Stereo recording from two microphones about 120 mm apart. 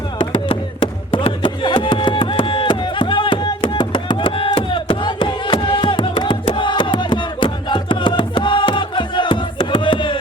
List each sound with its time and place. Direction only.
0.2 s music: 45° left (ahead or behind)